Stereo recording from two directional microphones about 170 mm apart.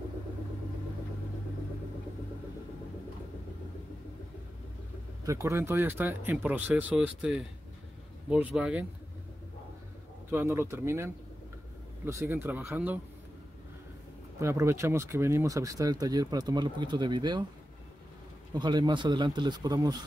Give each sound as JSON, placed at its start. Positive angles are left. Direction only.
{"t": 5.2, "sound": "speech", "side_deg": -20}
{"t": 10.3, "sound": "speech", "side_deg": -15}
{"t": 14.4, "sound": "speech", "side_deg": -15}
{"t": 18.5, "sound": "speech", "side_deg": -25}